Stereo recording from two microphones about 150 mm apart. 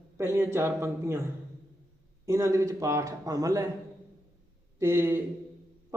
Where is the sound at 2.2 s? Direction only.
20° right (ahead or behind).